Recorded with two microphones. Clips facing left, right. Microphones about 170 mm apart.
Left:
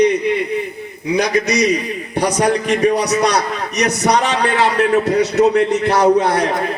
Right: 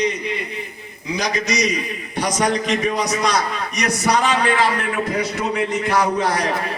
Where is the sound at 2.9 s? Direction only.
65° left (ahead or behind).